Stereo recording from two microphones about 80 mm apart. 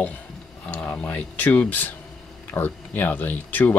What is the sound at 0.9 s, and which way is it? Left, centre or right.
Speech, left.